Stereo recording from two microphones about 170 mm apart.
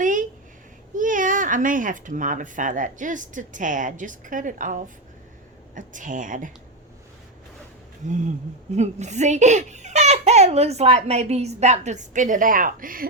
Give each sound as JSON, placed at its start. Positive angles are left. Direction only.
{"t": 0.0, "sound": "a sound", "side_deg": -50}
{"t": 0.9, "sound": "a child's voice", "side_deg": -50}
{"t": 8.0, "sound": "a child's voice", "side_deg": -45}